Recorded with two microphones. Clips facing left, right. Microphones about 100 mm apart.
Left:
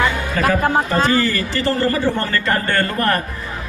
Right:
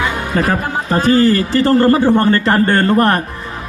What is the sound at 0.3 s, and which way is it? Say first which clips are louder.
Speech: right 3 dB; 35° right (ahead or behind).